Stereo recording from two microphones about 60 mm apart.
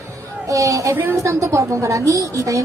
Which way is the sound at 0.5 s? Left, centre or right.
Right.